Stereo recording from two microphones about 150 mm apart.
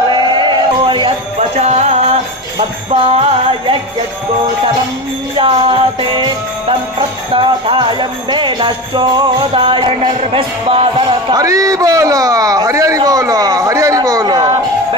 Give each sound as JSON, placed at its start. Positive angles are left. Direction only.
{"t": 0.4, "sound": "music", "side_deg": -30}
{"t": 1.6, "sound": "music", "side_deg": -45}
{"t": 5.4, "sound": "jingle bell", "side_deg": -40}